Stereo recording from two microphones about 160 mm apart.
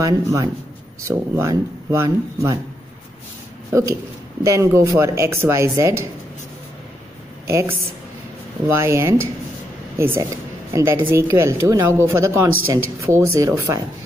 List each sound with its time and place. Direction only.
0.0 s speech: 20° right (ahead or behind)
3.7 s a woman's voice: 20° right (ahead or behind)
8.6 s a woman's voice: 15° right (ahead or behind)